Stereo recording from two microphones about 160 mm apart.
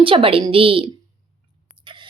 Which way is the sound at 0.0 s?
35° right (ahead or behind).